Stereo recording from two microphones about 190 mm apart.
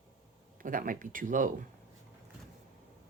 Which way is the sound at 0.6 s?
45° right (ahead or behind).